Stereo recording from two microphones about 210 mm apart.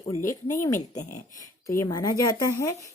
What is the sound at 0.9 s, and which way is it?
Speech, 35° left (ahead or behind).